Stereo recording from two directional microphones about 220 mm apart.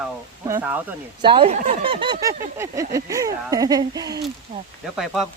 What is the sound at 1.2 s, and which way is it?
Speech, 25° right (ahead or behind).